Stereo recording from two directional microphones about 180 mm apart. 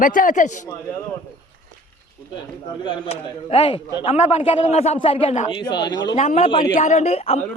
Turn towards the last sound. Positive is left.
turn(degrees=35)  # may be behind; listen again after turning